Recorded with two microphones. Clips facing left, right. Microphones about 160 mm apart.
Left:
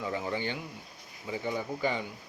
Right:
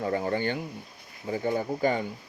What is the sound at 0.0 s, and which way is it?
Speech, 50° right (ahead or behind).